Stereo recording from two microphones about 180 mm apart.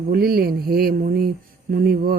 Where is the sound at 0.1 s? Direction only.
60° right (ahead or behind).